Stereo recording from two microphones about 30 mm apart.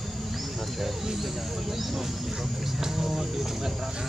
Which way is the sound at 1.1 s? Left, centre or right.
Centre.